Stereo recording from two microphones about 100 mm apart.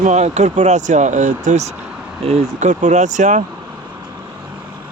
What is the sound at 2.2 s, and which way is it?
Speech, 90° right.